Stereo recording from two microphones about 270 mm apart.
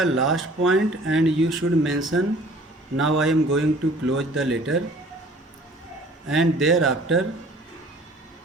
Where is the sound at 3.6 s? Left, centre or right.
Right.